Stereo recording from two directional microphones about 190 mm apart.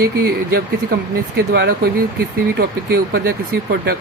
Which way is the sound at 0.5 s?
55° right (ahead or behind).